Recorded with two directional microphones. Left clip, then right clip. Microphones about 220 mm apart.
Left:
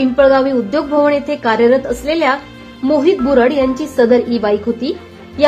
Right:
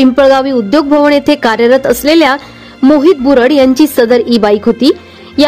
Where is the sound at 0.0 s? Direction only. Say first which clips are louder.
Right 4 dB; 50° right (ahead or behind).